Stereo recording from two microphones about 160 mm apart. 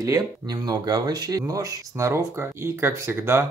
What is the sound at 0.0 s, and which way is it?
Speech, 20° right (ahead or behind).